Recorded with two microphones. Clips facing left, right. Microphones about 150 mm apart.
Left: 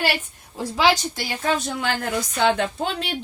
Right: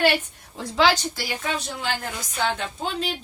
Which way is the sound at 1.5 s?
45° left (ahead or behind).